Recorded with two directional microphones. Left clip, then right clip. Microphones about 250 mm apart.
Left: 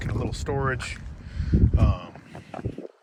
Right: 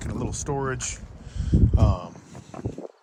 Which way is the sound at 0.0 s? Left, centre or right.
Centre.